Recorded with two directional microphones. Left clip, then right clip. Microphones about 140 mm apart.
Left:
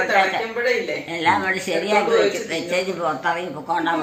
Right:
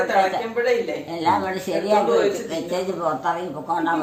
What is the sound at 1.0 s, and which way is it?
A woman's voice, 20° right (ahead or behind).